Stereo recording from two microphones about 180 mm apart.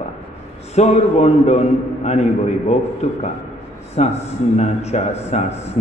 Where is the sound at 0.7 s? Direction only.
35° left (ahead or behind).